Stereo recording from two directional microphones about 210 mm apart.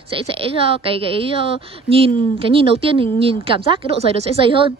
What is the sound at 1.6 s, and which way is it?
A woman's voice, 25° right (ahead or behind).